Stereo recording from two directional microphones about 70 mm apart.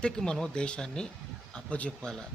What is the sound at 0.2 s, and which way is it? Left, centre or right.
Speech, centre.